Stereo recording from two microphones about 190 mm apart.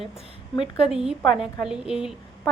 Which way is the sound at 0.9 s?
5° right (ahead or behind).